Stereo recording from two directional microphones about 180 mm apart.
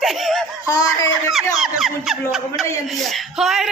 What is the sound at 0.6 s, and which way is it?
Speech, 20° left (ahead or behind).